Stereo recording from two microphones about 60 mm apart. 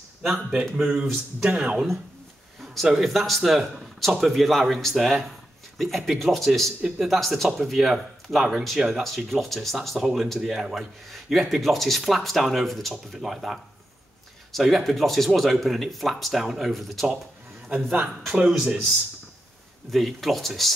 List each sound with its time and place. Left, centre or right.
0.2 s speech: centre
2.6 s speech: centre
19.9 s speech: centre